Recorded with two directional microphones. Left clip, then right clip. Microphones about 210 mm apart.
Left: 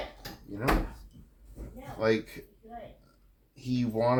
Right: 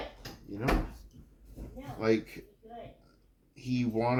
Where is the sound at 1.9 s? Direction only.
25° left (ahead or behind).